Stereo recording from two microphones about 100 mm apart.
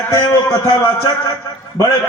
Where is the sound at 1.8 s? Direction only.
25° left (ahead or behind).